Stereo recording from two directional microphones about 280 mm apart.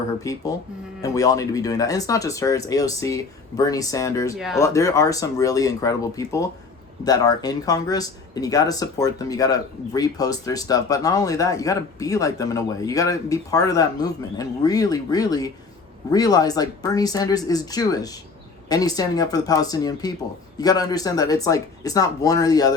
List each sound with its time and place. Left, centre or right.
0.2 s speech: centre
4.4 s speech: centre
4.6 s speech: centre